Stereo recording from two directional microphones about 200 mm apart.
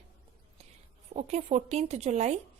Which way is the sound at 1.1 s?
35° right (ahead or behind).